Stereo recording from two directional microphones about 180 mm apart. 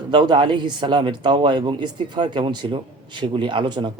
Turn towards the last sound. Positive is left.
turn(degrees=-25)  # may be behind; listen again after turning